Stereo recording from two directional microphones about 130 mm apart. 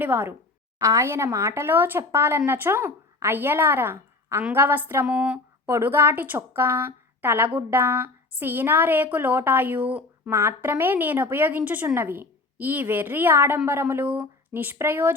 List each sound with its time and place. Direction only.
0.0 s a woman's voice: 15° right (ahead or behind)